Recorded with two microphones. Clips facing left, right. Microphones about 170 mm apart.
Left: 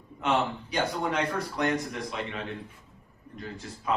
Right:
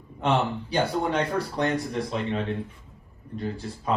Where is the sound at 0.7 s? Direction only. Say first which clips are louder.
Right 5 dB; 30° right (ahead or behind).